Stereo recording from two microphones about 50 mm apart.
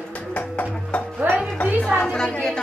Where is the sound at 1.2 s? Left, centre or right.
Right.